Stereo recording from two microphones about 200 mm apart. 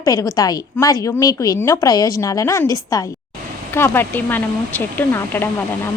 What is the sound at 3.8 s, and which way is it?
Speech, 10° left (ahead or behind).